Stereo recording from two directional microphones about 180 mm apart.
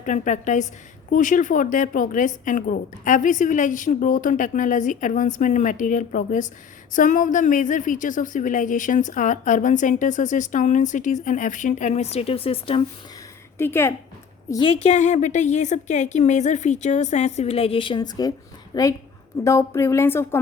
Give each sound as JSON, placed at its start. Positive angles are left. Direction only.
{"t": 0.0, "sound": "a woman's voice", "side_deg": 45}
{"t": 13.6, "sound": "speech", "side_deg": 15}
{"t": 14.5, "sound": "a woman's voice", "side_deg": 25}
{"t": 14.8, "sound": "a woman's voice", "side_deg": 40}